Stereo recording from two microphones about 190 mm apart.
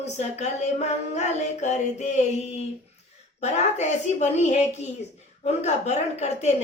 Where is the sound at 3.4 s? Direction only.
35° left (ahead or behind).